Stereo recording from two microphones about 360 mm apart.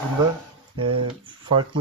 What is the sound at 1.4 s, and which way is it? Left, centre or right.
Speech, centre.